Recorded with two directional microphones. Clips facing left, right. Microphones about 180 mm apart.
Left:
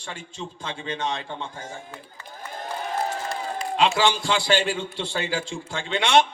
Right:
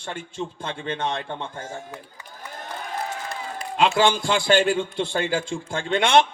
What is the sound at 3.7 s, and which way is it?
A man's voice, 50° right (ahead or behind).